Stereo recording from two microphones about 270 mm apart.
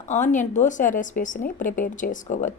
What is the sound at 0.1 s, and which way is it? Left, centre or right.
A woman's voice, left.